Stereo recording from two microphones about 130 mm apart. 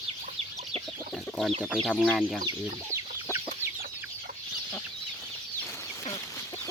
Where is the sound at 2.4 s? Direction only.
30° right (ahead or behind).